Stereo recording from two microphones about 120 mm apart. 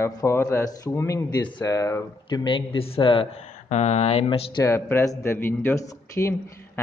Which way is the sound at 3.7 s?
65° left (ahead or behind).